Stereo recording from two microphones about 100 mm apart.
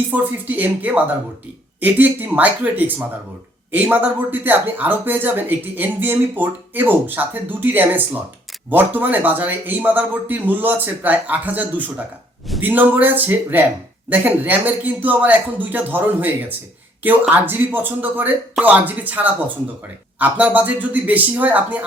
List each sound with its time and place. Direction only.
0.1 s a man's voice: 15° right (ahead or behind)
12.6 s a man's voice: 20° right (ahead or behind)